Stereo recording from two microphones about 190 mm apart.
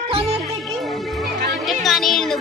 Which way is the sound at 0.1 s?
30° right (ahead or behind).